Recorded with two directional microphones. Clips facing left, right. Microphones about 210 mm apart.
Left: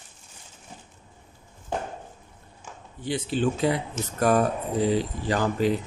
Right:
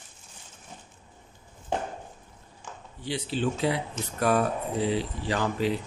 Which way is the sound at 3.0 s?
50° left (ahead or behind).